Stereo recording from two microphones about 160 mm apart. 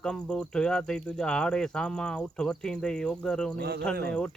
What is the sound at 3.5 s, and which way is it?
Speech, 85° right.